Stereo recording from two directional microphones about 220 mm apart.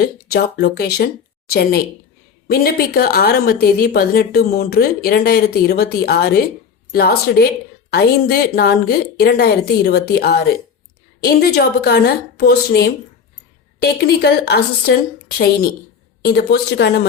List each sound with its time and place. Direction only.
0.0 s a woman's voice: 45° left (ahead or behind)
16.2 s a woman's voice: 45° left (ahead or behind)